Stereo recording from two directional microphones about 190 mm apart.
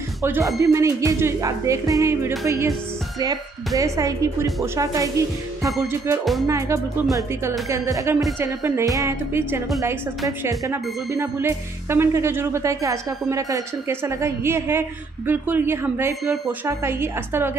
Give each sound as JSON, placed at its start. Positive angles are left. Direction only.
{"t": 0.2, "sound": "speech", "side_deg": -15}
{"t": 6.4, "sound": "speech", "side_deg": -15}